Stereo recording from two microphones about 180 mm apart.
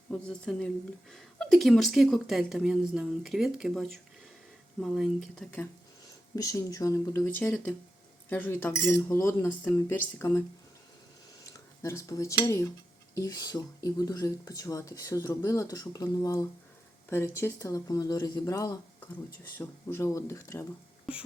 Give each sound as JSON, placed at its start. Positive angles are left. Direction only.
{"t": 0.1, "sound": "a woman's voice", "side_deg": 5}
{"t": 6.3, "sound": "speech", "side_deg": 20}
{"t": 11.8, "sound": "speech", "side_deg": 15}